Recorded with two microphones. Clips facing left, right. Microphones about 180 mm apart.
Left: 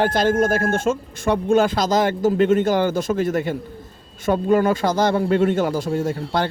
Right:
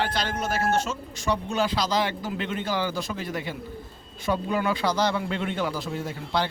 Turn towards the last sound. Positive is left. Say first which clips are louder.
# left 6 dB
turn(degrees=45)  # may be behind; listen again after turning